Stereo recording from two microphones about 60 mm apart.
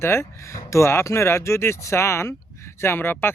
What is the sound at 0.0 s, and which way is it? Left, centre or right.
Speech, left.